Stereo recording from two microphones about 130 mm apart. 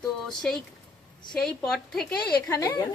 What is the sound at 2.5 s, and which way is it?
Speech, 25° left (ahead or behind).